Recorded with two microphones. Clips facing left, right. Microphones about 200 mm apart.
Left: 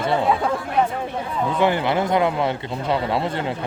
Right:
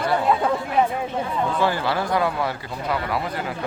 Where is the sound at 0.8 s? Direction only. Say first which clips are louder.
Even; 5° right (ahead or behind).